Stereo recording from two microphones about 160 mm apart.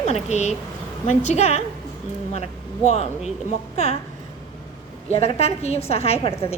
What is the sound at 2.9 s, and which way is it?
A woman's voice, 40° left (ahead or behind).